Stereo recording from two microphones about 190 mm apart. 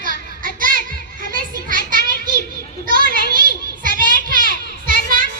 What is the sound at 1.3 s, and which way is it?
Children playing, 45° right (ahead or behind).